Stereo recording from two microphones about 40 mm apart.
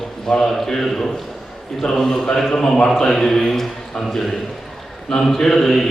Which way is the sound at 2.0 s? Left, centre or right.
Centre.